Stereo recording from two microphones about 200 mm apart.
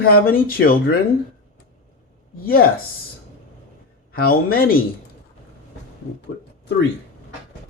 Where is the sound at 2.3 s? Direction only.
45° left (ahead or behind).